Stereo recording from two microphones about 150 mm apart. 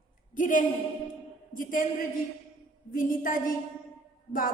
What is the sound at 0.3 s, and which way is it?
Speech, 60° left (ahead or behind).